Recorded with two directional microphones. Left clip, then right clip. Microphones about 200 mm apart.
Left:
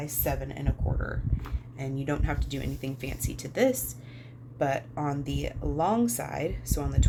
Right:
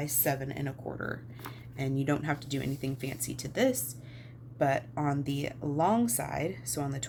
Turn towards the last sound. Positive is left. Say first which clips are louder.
# left 2 dB
turn(degrees=-10)  # may be behind; listen again after turning